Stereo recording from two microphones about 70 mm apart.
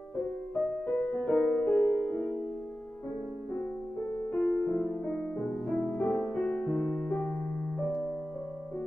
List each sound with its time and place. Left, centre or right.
0.9 s music: centre
4.4 s music: centre
7.8 s music: centre